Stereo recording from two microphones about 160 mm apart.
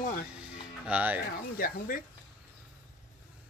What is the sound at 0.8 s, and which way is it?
Speech, 10° right (ahead or behind).